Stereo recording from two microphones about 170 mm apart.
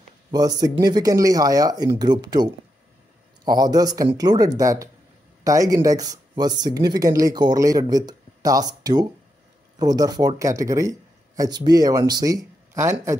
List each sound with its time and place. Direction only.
0.3 s speech: 25° right (ahead or behind)